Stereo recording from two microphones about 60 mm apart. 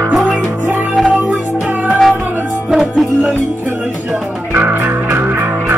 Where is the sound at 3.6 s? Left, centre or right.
Right.